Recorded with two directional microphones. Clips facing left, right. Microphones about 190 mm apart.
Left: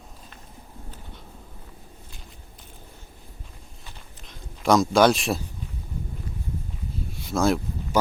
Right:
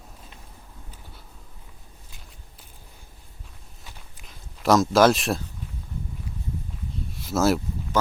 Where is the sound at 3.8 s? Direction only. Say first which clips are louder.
Even; 5° right (ahead or behind).